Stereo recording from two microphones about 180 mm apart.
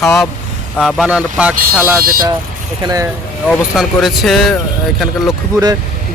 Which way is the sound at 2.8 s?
20° right (ahead or behind).